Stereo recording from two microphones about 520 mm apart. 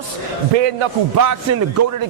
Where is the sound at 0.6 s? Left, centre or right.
Right.